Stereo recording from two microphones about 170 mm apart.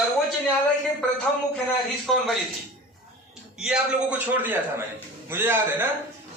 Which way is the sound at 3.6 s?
5° right (ahead or behind).